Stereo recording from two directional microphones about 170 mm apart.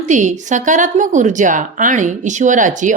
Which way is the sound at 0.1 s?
45° right (ahead or behind).